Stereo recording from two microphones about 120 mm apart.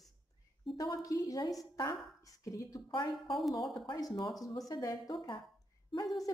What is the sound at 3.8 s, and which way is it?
A woman's voice, 30° left (ahead or behind).